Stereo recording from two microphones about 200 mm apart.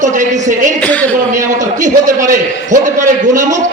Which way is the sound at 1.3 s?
40° right (ahead or behind).